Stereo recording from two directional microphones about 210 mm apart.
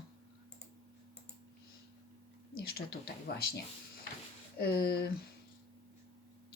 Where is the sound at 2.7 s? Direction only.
50° left (ahead or behind).